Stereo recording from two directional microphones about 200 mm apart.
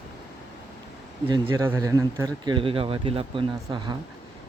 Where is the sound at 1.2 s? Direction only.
20° right (ahead or behind).